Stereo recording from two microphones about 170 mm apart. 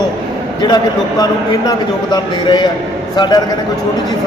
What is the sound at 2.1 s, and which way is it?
Speech, 25° left (ahead or behind).